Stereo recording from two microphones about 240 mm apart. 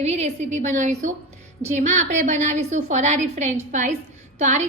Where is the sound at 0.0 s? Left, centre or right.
Right.